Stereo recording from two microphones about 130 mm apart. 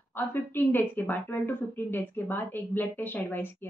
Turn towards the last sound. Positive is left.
turn(degrees=15)  # may be behind; listen again after turning